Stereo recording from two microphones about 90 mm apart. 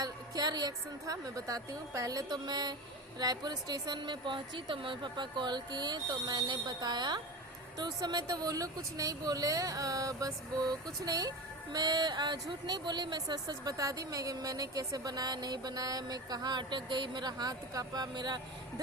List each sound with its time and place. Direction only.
0.0 s speech: 50° right (ahead or behind)